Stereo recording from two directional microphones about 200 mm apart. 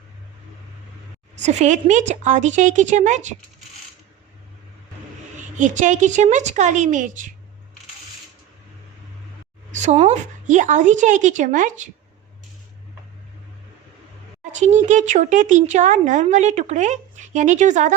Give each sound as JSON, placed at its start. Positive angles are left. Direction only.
{"t": 1.4, "sound": "a woman's voice", "side_deg": -35}
{"t": 5.4, "sound": "a woman's voice", "side_deg": -40}
{"t": 9.7, "sound": "a woman's voice", "side_deg": -35}
{"t": 14.6, "sound": "a woman's voice", "side_deg": -35}